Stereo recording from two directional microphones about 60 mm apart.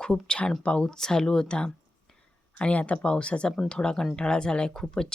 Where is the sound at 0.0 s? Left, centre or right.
Centre.